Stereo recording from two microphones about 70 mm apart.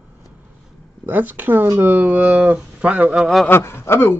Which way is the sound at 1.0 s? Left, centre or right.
Right.